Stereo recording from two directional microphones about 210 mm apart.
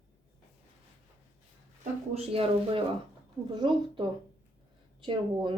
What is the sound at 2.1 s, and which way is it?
Speech, 30° right (ahead or behind).